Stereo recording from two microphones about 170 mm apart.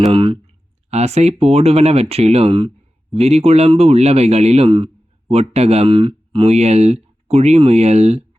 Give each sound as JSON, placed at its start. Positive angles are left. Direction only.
{"t": 0.0, "sound": "speech", "side_deg": -30}